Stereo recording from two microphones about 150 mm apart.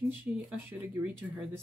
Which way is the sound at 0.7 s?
5° right (ahead or behind).